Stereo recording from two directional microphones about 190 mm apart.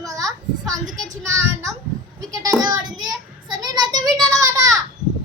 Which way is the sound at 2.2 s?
20° right (ahead or behind).